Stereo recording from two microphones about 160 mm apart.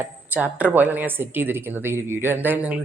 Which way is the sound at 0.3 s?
5° right (ahead or behind).